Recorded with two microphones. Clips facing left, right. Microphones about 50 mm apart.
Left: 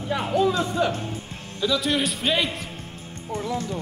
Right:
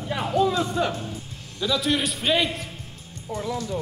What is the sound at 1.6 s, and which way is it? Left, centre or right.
Speech, centre.